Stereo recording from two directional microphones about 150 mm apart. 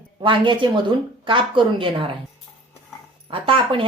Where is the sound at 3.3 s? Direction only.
35° right (ahead or behind).